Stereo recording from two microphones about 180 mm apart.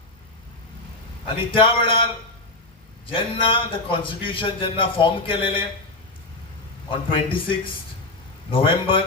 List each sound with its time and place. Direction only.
1.4 s a man's voice: 30° left (ahead or behind)
3.1 s a man's voice: 30° left (ahead or behind)
6.9 s a man's voice: 30° left (ahead or behind)
8.4 s a man's voice: 30° left (ahead or behind)